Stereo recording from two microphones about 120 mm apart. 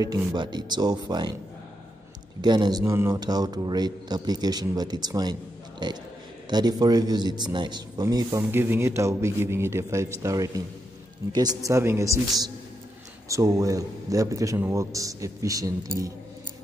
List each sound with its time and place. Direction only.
0.0 s a man's voice: 30° right (ahead or behind)
2.4 s a man's voice: 35° right (ahead or behind)
2.8 s a man's voice: 25° right (ahead or behind)
3.2 s a man's voice: 35° right (ahead or behind)
8.5 s a man's voice: 20° right (ahead or behind)